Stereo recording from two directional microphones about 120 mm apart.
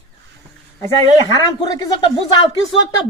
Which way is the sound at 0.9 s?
35° left (ahead or behind).